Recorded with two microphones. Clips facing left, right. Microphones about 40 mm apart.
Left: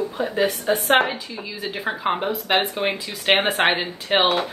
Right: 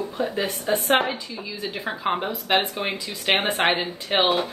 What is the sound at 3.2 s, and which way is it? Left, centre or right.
Speech, left.